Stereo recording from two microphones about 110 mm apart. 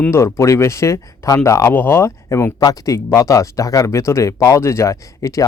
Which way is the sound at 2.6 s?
35° left (ahead or behind).